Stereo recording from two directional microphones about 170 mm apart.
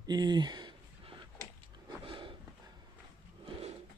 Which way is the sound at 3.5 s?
35° right (ahead or behind).